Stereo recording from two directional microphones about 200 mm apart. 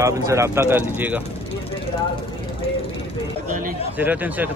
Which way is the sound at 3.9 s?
10° right (ahead or behind).